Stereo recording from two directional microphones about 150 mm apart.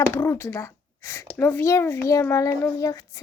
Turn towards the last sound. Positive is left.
turn(degrees=20)  # may be behind; listen again after turning